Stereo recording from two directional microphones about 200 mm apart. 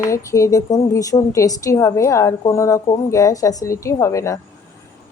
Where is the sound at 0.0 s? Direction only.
15° left (ahead or behind).